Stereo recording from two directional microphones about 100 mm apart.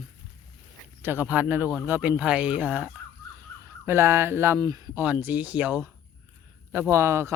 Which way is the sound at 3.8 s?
25° right (ahead or behind).